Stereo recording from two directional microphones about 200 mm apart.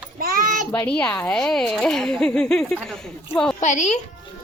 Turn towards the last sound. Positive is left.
turn(degrees=35)  # may be behind; listen again after turning